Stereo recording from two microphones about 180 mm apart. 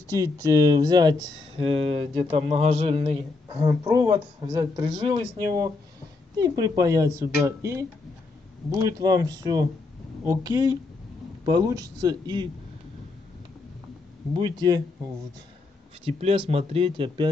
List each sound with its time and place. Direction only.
0.1 s a man's voice: 20° right (ahead or behind)
2.3 s a man's voice: 35° right (ahead or behind)
14.3 s a man's voice: 25° right (ahead or behind)
16.0 s speech: 35° right (ahead or behind)